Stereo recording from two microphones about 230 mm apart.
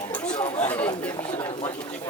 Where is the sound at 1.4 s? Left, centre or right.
Left.